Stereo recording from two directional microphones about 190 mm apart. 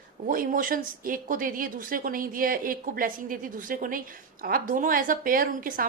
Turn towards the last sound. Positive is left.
turn(degrees=-50)  # may be behind; listen again after turning